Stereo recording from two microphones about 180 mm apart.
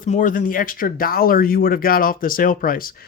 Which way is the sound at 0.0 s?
45° left (ahead or behind).